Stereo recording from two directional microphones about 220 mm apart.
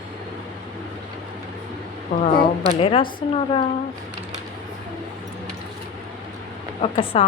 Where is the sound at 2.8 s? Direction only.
25° left (ahead or behind).